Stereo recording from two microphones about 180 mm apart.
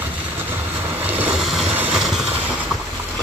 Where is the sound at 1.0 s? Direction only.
10° right (ahead or behind).